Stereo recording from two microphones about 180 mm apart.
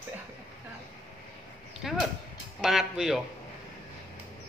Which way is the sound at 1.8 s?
Centre (ahead or behind).